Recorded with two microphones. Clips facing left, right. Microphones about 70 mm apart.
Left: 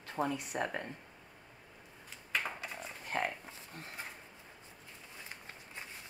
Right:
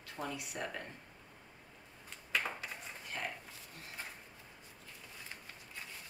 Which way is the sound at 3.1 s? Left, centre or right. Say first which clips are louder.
Left 7 dB; left.